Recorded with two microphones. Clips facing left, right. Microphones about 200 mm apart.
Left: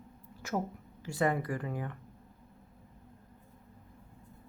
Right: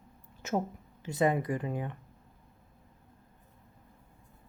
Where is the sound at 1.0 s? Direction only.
20° right (ahead or behind).